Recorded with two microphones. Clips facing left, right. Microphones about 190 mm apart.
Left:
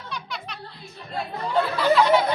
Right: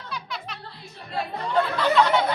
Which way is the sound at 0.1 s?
Centre (ahead or behind).